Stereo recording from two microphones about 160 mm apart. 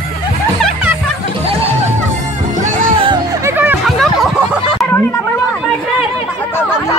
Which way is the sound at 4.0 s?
Centre (ahead or behind).